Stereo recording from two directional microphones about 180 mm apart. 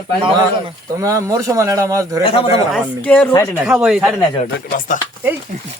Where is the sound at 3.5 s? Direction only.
5° right (ahead or behind).